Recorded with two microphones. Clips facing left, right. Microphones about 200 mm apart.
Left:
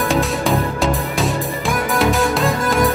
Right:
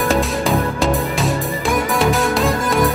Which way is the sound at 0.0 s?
Centre (ahead or behind).